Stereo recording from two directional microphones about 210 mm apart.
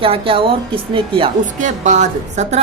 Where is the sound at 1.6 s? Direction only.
35° right (ahead or behind).